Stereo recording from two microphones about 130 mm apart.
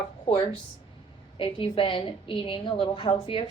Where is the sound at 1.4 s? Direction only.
40° left (ahead or behind).